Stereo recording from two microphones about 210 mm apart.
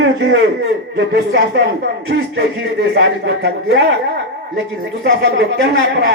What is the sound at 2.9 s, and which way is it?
Speech, 50° right (ahead or behind).